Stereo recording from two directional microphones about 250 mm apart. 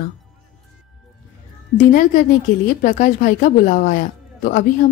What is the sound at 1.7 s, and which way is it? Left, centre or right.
A woman's voice, left.